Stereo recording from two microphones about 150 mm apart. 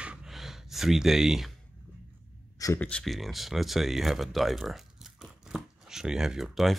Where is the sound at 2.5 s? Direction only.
20° left (ahead or behind).